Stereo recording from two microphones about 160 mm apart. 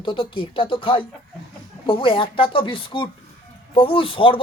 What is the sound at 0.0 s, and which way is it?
Speech, 35° left (ahead or behind).